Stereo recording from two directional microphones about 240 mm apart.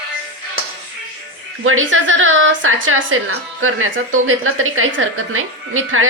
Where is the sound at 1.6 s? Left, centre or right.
Right.